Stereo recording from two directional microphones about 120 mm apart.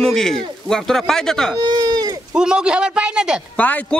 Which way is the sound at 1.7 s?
35° right (ahead or behind).